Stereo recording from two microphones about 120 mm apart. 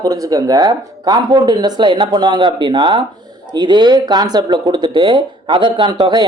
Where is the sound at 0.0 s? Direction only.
30° right (ahead or behind).